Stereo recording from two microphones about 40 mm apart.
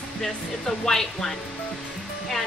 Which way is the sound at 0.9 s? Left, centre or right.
Centre.